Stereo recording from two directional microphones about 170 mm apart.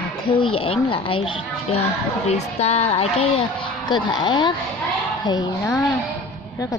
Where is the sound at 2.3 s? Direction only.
40° left (ahead or behind); by 5.8 s 20° left (ahead or behind).